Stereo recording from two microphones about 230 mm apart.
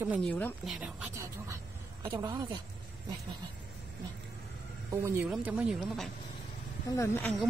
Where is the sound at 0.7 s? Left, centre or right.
Centre.